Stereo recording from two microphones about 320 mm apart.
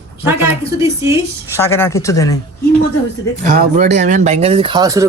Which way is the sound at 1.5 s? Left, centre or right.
Centre.